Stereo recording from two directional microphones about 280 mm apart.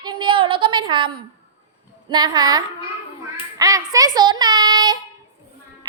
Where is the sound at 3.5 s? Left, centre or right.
Centre.